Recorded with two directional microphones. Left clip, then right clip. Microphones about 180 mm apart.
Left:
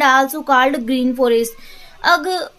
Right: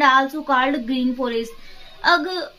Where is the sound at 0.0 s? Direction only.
55° left (ahead or behind).